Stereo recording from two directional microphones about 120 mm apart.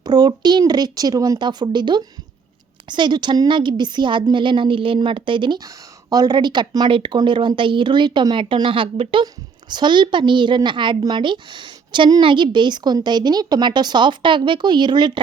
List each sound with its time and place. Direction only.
0.0 s a woman's voice: 35° right (ahead or behind)
9.2 s a woman's voice: 35° right (ahead or behind)